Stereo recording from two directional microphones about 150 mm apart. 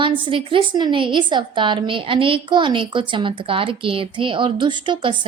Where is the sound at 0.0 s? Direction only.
35° right (ahead or behind).